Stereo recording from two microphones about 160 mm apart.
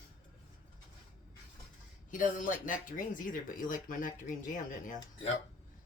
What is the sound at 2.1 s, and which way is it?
Speech, 55° left (ahead or behind).